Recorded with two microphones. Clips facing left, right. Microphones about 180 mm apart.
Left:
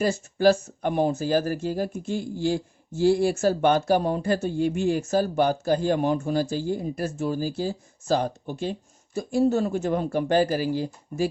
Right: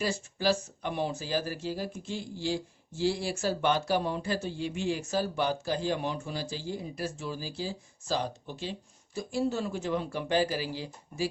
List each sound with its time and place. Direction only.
0.0 s speech: 50° left (ahead or behind)